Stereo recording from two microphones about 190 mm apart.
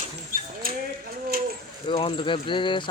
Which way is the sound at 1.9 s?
25° left (ahead or behind).